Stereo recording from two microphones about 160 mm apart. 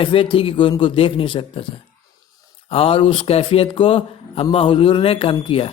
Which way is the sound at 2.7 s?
35° left (ahead or behind).